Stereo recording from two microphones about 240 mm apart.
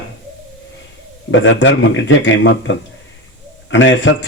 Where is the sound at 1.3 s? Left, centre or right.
Left.